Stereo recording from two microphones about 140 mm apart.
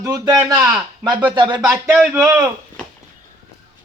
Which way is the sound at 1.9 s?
10° right (ahead or behind).